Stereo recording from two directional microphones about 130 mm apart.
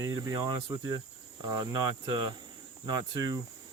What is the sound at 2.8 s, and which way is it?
Speech, 30° right (ahead or behind).